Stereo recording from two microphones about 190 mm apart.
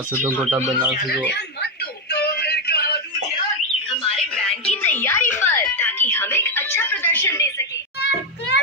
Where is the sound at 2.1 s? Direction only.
55° left (ahead or behind).